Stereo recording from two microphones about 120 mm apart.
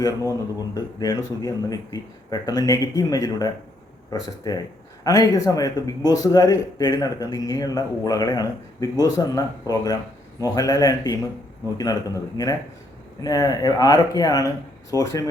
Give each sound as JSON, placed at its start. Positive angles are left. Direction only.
{"t": 0.3, "sound": "speech", "side_deg": 30}
{"t": 12.4, "sound": "speech", "side_deg": 35}